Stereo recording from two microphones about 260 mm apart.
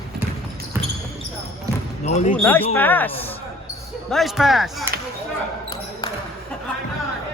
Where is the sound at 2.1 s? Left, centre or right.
Left.